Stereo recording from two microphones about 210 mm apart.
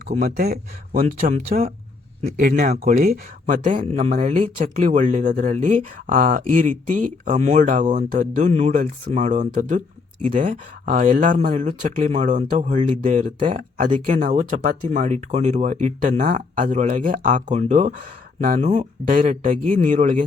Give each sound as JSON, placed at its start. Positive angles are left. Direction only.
{"t": 0.1, "sound": "speech", "side_deg": -40}